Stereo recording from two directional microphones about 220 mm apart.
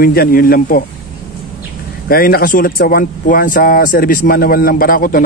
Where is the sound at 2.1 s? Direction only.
45° left (ahead or behind).